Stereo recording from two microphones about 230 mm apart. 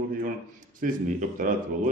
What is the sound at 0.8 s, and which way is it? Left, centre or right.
Speech, right.